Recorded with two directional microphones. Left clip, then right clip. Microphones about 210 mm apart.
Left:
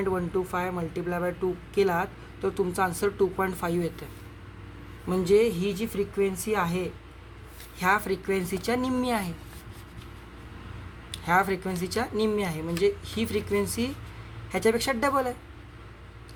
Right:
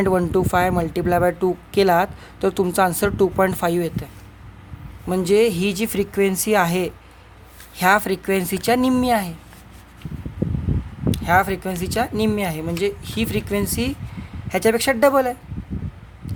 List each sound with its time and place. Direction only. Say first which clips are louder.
0.0 s speech: right 9 dB; 45° right (ahead or behind)
5.0 s speech: right 5 dB; 40° right (ahead or behind)
11.1 s speech: right 6 dB; 35° right (ahead or behind)